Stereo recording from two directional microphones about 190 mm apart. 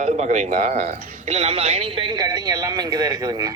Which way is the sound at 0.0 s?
40° right (ahead or behind).